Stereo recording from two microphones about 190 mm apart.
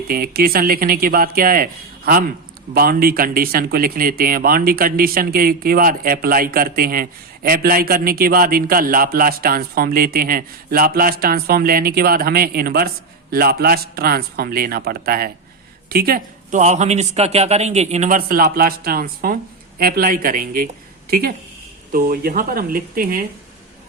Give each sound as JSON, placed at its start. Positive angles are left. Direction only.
{"t": 0.1, "sound": "a man's voice", "side_deg": -50}